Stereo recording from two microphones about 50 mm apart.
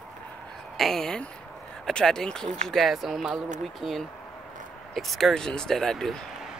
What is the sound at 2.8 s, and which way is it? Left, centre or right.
Speech, centre.